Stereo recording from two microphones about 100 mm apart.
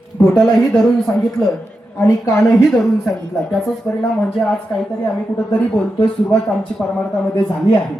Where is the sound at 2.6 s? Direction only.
5° left (ahead or behind).